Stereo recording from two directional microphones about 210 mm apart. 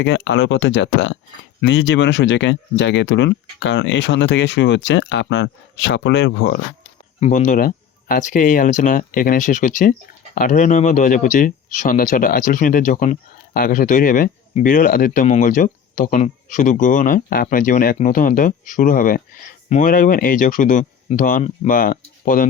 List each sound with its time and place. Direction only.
0.0 s speech: 60° left (ahead or behind)
7.2 s speech: 35° left (ahead or behind)